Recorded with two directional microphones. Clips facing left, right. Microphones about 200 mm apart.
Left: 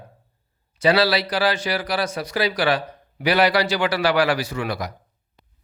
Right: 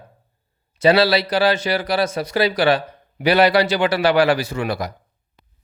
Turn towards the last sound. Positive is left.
turn(degrees=-30)  # may be behind; listen again after turning